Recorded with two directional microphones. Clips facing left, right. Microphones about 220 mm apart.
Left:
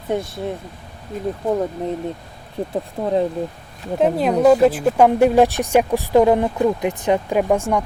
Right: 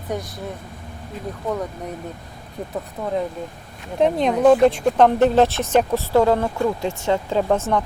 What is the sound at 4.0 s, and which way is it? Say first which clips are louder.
Speech: left 1 dB; 5° left (ahead or behind).